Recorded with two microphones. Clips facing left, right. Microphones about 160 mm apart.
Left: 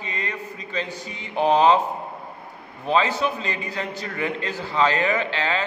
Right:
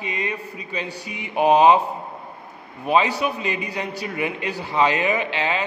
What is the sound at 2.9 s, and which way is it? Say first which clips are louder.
A man's voice: right 1 dB; 15° right (ahead or behind).